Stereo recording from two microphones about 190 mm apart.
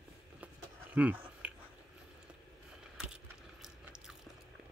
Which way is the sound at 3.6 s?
5° right (ahead or behind).